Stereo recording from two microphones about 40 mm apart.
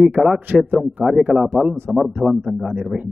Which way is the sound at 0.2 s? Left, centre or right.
Centre.